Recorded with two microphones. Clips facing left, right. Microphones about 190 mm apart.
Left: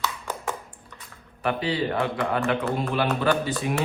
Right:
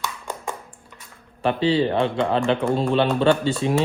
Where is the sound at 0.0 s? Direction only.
15° right (ahead or behind).